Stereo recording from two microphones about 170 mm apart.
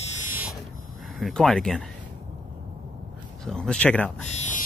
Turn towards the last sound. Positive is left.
turn(degrees=45)  # may be behind; listen again after turning